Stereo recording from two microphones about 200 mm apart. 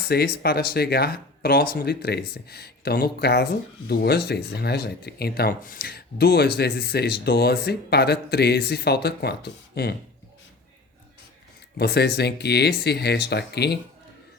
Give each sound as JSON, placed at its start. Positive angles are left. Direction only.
{"t": 0.0, "sound": "speech", "side_deg": 50}
{"t": 11.8, "sound": "speech", "side_deg": 55}